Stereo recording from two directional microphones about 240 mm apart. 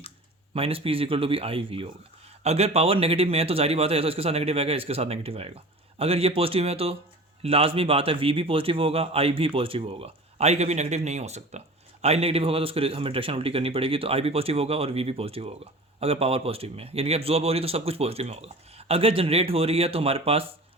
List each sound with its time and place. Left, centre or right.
0.5 s a man's voice: right